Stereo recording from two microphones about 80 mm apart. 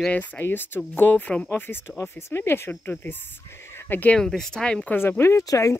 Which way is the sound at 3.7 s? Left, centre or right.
Left.